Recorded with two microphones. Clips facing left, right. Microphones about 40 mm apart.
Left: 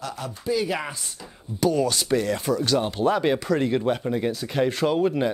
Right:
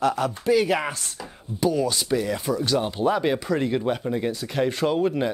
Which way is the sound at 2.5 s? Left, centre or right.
Centre.